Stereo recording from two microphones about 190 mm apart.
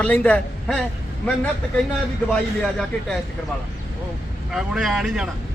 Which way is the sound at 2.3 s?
5° left (ahead or behind).